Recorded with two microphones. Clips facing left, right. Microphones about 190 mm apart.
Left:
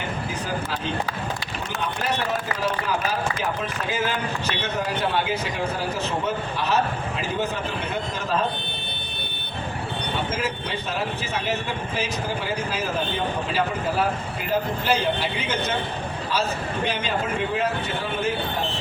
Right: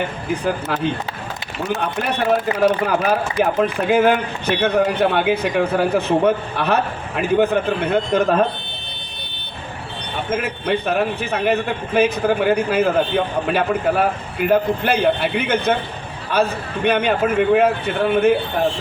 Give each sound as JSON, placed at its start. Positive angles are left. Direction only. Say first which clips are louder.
{"t": 1.8, "sound": "a man's voice", "louder": "right 2 dB", "side_deg": -55}
{"t": 10.3, "sound": "a man's voice", "louder": "right 7 dB", "side_deg": -60}